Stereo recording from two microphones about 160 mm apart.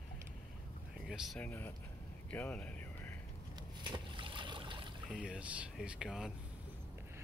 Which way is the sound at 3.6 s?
30° right (ahead or behind).